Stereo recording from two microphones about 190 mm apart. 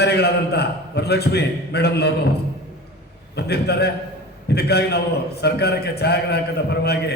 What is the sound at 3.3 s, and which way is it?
A man's voice, 60° left (ahead or behind).